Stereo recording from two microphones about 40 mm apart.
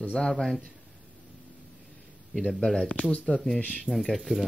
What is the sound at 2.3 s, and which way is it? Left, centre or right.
Speech, centre.